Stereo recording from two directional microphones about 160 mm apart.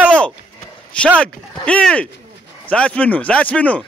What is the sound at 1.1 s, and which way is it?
Speech, 5° left (ahead or behind).